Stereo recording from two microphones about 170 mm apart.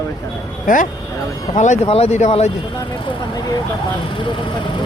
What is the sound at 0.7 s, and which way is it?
Speech, 50° left (ahead or behind).